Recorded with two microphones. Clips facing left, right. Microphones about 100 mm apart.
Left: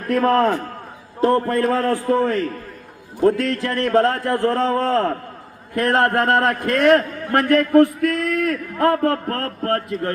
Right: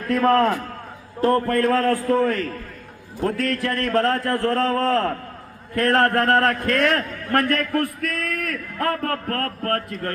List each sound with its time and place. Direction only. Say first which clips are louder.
0.1 s a man's voice: left 1 dB; 20° left (ahead or behind)